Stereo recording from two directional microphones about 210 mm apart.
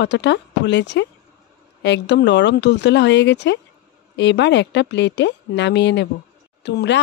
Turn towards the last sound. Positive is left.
turn(degrees=55)  # may be behind; listen again after turning